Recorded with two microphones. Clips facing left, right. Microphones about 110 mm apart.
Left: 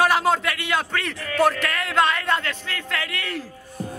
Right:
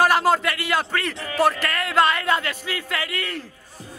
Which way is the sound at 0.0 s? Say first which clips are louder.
Right 1 dB; centre (ahead or behind).